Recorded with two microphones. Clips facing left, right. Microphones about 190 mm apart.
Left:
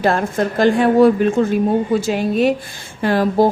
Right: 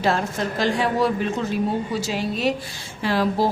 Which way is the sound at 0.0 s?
55° left (ahead or behind).